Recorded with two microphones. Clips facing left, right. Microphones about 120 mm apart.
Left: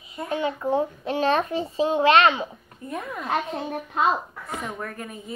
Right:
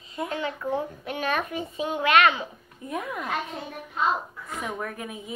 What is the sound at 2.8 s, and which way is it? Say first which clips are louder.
Speech: even; 5° right (ahead or behind).